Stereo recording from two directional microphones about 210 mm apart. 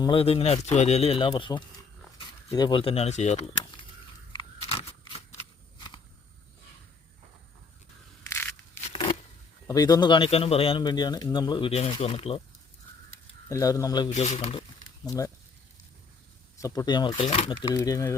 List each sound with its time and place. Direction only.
0.0 s speech: 25° left (ahead or behind)
4.3 s a sound: 25° left (ahead or behind)
8.3 s a sound: 10° left (ahead or behind)
8.9 s a sound: 25° left (ahead or behind)
9.6 s speech: 20° left (ahead or behind)
13.5 s speech: 15° left (ahead or behind)
14.1 s speech: 30° left (ahead or behind)
15.0 s speech: 15° left (ahead or behind)
16.6 s speech: 15° left (ahead or behind)